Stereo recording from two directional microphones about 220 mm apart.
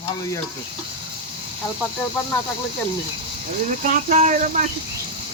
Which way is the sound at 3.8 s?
35° right (ahead or behind).